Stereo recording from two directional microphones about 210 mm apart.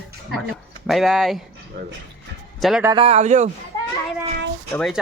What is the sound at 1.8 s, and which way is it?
Speech, 50° right (ahead or behind).